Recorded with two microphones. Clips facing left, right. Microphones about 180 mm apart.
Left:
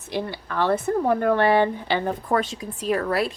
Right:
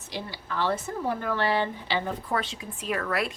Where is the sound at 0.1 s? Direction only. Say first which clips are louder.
Left 7 dB; 55° left (ahead or behind).